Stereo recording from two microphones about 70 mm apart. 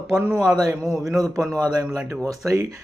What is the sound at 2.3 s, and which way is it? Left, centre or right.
Speech, right.